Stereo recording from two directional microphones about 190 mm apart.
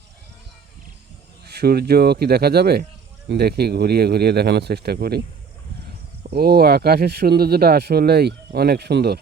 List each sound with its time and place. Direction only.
1.5 s speech: 55° right (ahead or behind)
6.3 s speech: 55° right (ahead or behind)